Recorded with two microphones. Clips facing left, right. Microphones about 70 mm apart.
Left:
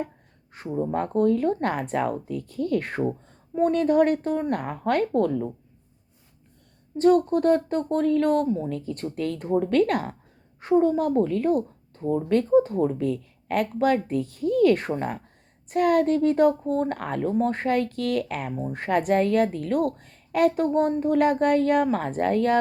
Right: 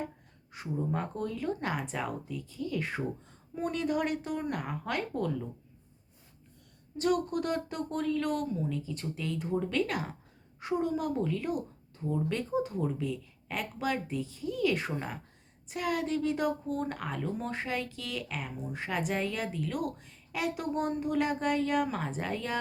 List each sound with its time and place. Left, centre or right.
0.5 s speech: left
3.6 s speech: left
6.9 s speech: left
8.7 s speech: left
10.6 s speech: left